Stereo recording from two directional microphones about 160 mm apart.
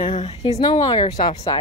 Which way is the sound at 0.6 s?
25° left (ahead or behind).